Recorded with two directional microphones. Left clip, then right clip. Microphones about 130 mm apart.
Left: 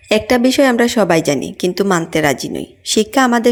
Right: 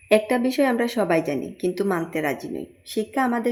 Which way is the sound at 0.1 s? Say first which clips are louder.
Left 6 dB; 30° left (ahead or behind).